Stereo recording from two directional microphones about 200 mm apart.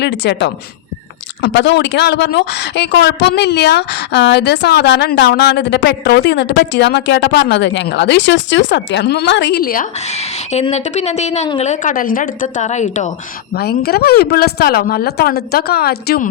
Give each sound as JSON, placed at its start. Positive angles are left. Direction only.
{"t": 0.0, "sound": "speech", "side_deg": 60}
{"t": 10.1, "sound": "a woman's voice", "side_deg": 35}
{"t": 13.5, "sound": "speech", "side_deg": 50}